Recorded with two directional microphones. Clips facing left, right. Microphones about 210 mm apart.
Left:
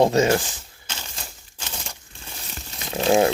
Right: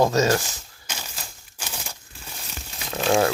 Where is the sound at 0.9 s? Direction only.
10° right (ahead or behind).